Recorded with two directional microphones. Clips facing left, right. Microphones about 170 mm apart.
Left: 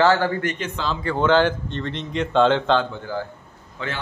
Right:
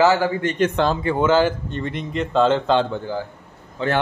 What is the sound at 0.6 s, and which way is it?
Speech, 55° right (ahead or behind).